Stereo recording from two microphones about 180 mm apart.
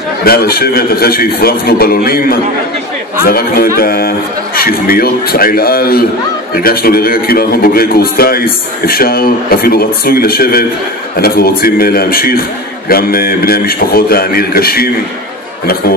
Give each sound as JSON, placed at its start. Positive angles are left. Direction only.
{"t": 0.2, "sound": "a man's voice", "side_deg": 55}